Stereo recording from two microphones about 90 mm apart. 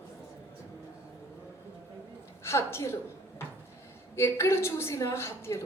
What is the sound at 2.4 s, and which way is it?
Speech, 30° left (ahead or behind).